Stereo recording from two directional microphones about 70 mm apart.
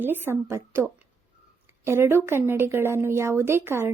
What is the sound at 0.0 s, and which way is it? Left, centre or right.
Speech, right.